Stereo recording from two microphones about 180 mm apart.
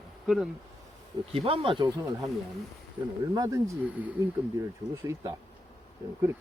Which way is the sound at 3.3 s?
20° right (ahead or behind).